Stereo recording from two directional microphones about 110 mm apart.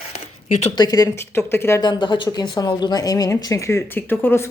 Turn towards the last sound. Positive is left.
turn(degrees=15)  # may be behind; listen again after turning